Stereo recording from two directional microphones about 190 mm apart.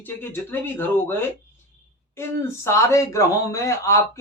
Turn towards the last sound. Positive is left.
turn(degrees=15)  # may be behind; listen again after turning